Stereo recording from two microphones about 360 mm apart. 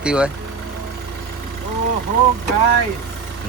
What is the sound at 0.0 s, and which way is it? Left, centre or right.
Speech, centre.